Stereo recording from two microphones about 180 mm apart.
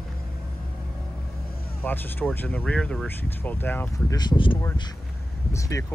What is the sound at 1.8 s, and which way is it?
Speech, 10° left (ahead or behind).